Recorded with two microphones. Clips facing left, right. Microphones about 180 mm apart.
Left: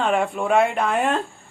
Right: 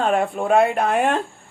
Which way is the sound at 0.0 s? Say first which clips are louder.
Right 1 dB; 45° right (ahead or behind).